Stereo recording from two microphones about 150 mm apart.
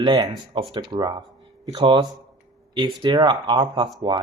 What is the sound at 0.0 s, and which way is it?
Speech, 30° right (ahead or behind).